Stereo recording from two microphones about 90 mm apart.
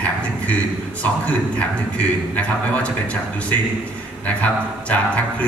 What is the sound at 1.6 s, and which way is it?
A man's voice, 15° left (ahead or behind).